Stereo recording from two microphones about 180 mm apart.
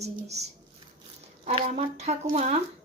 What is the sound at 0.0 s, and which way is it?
Speech, 35° right (ahead or behind).